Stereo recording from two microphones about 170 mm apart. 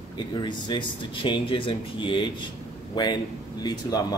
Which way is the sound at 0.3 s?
25° left (ahead or behind).